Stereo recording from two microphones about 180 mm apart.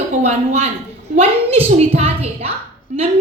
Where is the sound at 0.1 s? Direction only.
40° right (ahead or behind).